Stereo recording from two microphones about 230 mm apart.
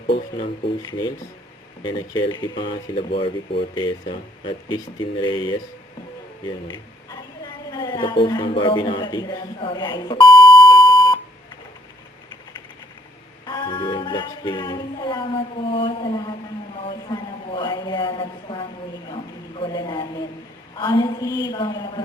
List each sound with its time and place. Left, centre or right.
0.1 s speech: left
6.7 s a woman's voice: centre
13.4 s a sound: centre
19.1 s a man's voice: left